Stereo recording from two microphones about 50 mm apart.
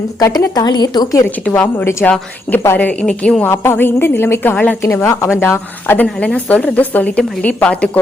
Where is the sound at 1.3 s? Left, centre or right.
Left.